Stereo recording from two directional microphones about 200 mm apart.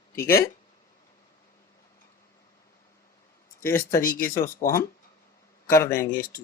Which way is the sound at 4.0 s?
45° left (ahead or behind).